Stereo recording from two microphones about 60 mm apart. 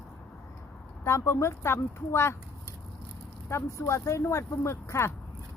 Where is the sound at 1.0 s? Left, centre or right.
Left.